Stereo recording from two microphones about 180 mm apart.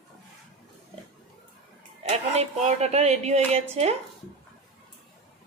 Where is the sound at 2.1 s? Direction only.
35° right (ahead or behind).